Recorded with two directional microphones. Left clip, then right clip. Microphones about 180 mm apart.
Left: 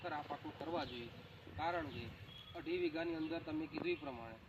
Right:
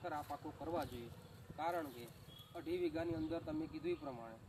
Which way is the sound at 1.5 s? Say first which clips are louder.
Left 1 dB; 20° right (ahead or behind).